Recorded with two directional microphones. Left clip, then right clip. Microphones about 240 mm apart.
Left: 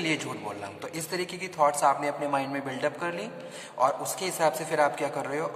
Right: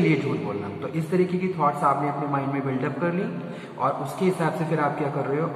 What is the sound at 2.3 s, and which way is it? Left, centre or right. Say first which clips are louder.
A man's voice: right 3 dB; left.